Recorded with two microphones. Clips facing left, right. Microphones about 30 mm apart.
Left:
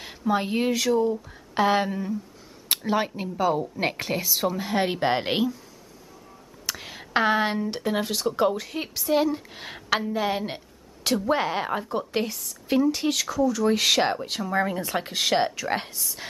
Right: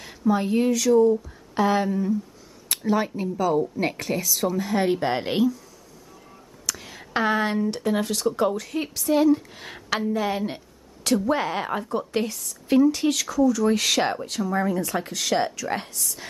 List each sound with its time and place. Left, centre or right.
0.0 s a woman's voice: centre
6.6 s a sound: left
7.7 s speech: centre
14.2 s a woman's voice: left